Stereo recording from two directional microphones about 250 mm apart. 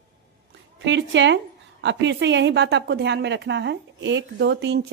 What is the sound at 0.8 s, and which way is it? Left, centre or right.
A woman's voice, right.